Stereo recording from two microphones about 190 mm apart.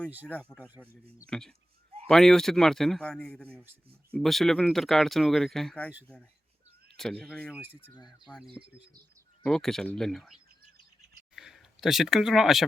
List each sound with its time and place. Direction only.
0.3 s speech: 5° left (ahead or behind)
3.5 s speech: 10° right (ahead or behind)
4.1 s speech: centre (ahead or behind)
6.9 s speech: 5° left (ahead or behind)
7.5 s speech: 10° right (ahead or behind)
7.9 s speech: 20° left (ahead or behind)
9.4 s speech: 5° left (ahead or behind)